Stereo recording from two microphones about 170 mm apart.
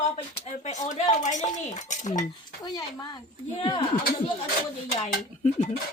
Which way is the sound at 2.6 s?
25° left (ahead or behind).